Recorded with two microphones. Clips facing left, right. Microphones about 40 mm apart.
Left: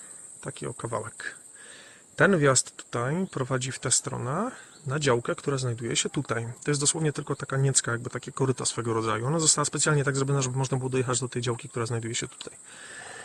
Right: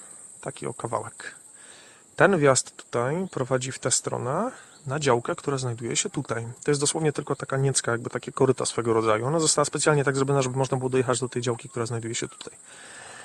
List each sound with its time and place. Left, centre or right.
0.4 s speech: centre
6.1 s speech: left
6.6 s speech: centre
7.9 s speech: centre
11.3 s speech: centre